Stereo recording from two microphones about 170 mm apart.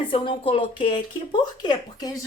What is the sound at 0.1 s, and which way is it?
A woman's voice, 30° left (ahead or behind).